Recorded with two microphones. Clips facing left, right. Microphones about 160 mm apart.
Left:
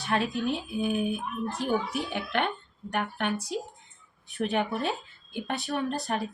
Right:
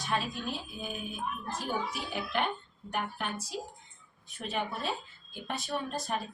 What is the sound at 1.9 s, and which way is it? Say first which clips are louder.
Speech: left 5 dB; 65° left (ahead or behind).